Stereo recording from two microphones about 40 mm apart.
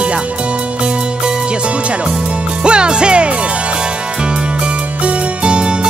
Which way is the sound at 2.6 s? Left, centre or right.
Right.